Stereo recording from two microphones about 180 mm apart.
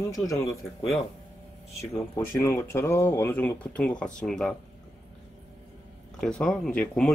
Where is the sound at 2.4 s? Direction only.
15° left (ahead or behind).